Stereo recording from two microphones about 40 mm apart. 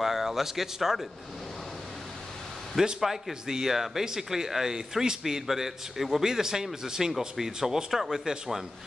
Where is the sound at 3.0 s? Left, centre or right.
Centre.